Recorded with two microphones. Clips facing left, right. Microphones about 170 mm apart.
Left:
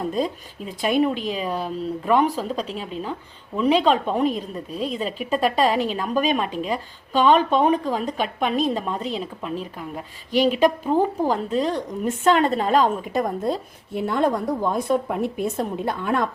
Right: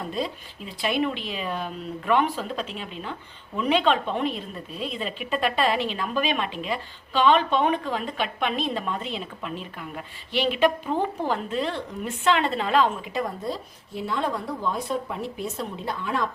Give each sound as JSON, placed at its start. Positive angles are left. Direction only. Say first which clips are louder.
{"t": 0.1, "sound": "a woman's voice", "louder": "left 5 dB", "side_deg": 45}